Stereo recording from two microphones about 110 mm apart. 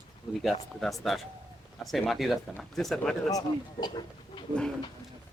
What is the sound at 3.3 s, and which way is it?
Speech, 35° left (ahead or behind).